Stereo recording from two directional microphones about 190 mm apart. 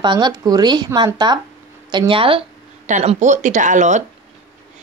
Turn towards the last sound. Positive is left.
turn(degrees=-40)  # may be behind; listen again after turning